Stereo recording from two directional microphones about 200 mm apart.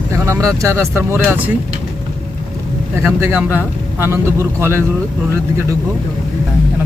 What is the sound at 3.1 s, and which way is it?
Speech, 10° right (ahead or behind).